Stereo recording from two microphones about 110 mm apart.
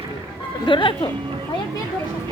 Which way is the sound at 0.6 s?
50° left (ahead or behind).